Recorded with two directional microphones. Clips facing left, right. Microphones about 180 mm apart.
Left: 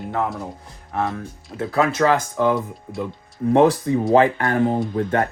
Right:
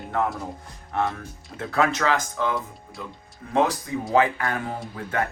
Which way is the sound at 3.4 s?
35° left (ahead or behind).